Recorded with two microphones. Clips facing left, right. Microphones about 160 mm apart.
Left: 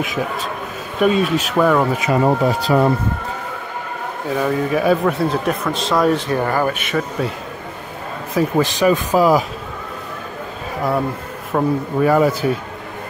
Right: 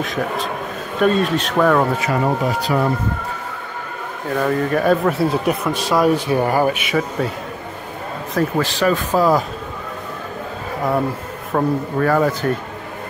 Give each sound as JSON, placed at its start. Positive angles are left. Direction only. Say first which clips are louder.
{"t": 0.9, "sound": "speech", "louder": "left 1 dB", "side_deg": 5}
{"t": 2.2, "sound": "speech", "louder": "left 3 dB", "side_deg": 30}
{"t": 4.4, "sound": "a man's voice", "louder": "even", "side_deg": 5}
{"t": 6.2, "sound": "speech", "louder": "right 2 dB", "side_deg": -15}
{"t": 8.4, "sound": "speech", "louder": "left 2 dB", "side_deg": 15}
{"t": 11.5, "sound": "a man's voice", "louder": "left 1 dB", "side_deg": 0}
{"t": 12.0, "sound": "speech", "louder": "left 3 dB", "side_deg": 10}